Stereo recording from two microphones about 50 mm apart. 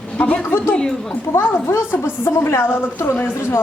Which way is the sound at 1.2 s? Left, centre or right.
Left.